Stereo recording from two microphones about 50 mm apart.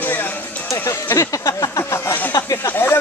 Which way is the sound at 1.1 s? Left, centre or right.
Left.